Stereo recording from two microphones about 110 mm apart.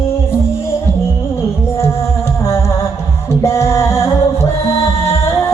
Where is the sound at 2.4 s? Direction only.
25° left (ahead or behind).